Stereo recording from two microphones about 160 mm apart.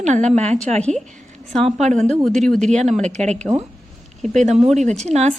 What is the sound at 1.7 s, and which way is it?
Speech, 45° right (ahead or behind).